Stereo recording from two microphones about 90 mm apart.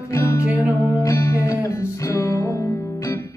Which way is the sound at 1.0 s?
30° left (ahead or behind).